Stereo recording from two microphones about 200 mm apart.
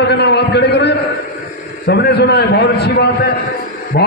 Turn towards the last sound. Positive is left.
turn(degrees=50)  # may be behind; listen again after turning